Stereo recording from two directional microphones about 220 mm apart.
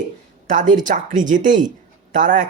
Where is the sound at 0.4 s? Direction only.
35° right (ahead or behind).